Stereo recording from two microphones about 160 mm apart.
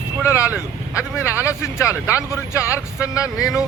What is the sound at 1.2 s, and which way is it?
Speech, 20° left (ahead or behind).